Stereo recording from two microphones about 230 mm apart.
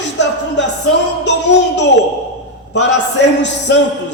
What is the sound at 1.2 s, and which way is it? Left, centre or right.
Music, left.